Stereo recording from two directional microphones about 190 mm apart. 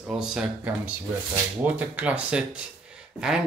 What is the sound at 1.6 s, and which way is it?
Speech, 10° right (ahead or behind).